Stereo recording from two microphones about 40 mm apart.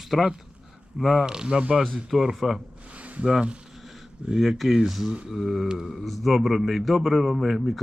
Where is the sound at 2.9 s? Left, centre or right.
Right.